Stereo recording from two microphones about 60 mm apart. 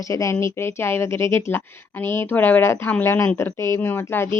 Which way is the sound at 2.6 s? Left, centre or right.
Left.